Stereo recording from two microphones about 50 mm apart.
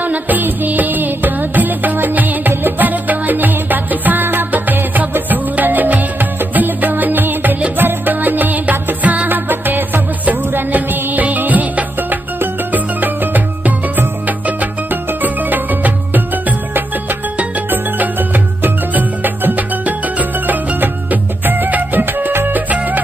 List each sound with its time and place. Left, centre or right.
0.0 s music: right